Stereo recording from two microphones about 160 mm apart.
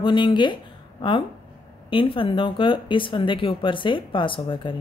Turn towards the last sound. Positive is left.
turn(degrees=30)  # may be behind; listen again after turning